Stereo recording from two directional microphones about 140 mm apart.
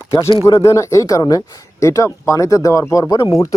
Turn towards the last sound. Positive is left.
turn(degrees=25)  # may be behind; listen again after turning